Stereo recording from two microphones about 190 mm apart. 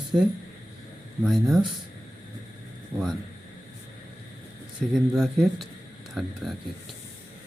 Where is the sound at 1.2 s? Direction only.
Centre (ahead or behind).